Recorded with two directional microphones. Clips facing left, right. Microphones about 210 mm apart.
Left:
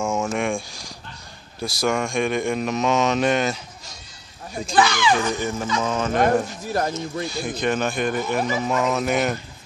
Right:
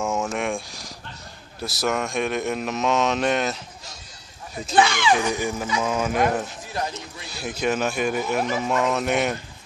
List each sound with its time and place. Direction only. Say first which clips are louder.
0.0 s a sound: left 2 dB; centre (ahead or behind)
1.6 s speech: left 2 dB; 5° right (ahead or behind)
4.7 s speech: even; 25° right (ahead or behind)
5.1 s speech: even; 10° right (ahead or behind)
6.7 s speech: left 8 dB; 50° left (ahead or behind)
7.2 s speech: right 1 dB; 5° right (ahead or behind)